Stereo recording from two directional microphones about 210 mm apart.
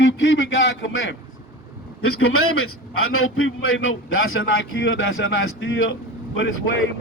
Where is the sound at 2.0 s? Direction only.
85° left.